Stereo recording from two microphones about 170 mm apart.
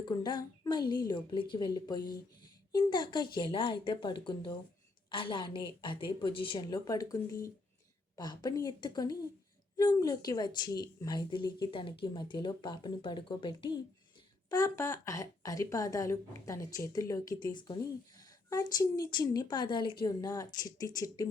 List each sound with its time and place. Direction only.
0.0 s speech: 25° left (ahead or behind)